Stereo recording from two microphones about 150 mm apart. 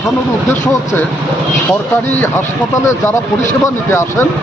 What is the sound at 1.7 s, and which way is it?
Speech, 15° left (ahead or behind).